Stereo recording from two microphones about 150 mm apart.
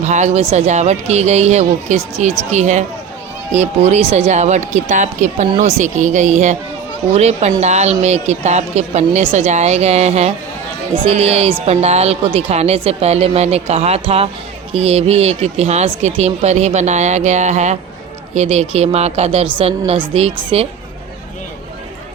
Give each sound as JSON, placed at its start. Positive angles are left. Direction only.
{"t": 0.0, "sound": "a woman's voice", "side_deg": -50}